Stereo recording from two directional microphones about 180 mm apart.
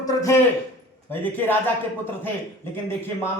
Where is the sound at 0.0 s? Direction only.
15° left (ahead or behind).